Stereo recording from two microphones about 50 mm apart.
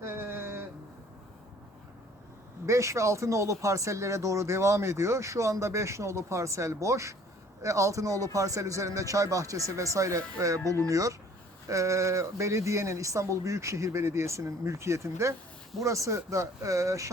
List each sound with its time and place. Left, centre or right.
0.0 s a sound: right
2.6 s a man's voice: right
15.8 s a man's voice: right